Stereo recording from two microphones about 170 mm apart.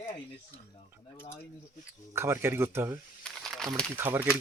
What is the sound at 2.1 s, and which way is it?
Speech, 15° right (ahead or behind).